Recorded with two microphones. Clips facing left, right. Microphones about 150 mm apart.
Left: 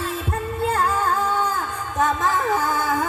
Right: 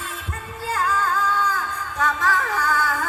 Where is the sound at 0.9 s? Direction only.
25° left (ahead or behind).